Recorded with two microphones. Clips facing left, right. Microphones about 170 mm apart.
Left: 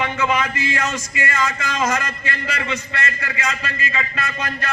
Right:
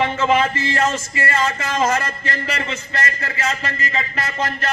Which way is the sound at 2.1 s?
40° right (ahead or behind).